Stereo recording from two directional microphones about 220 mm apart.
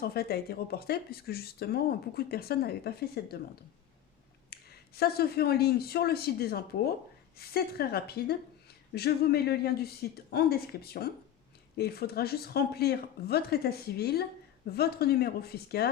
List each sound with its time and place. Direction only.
0.0 s speech: 45° left (ahead or behind)
4.4 s speech: 45° left (ahead or behind)